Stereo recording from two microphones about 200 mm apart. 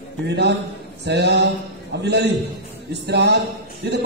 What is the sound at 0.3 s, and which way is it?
A man's voice, 55° right (ahead or behind).